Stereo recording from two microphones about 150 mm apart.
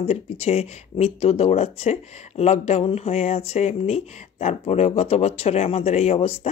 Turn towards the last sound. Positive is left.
turn(degrees=45)  # may be behind; listen again after turning